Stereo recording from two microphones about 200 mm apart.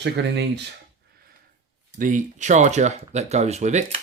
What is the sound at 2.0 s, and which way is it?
Speech, 40° right (ahead or behind).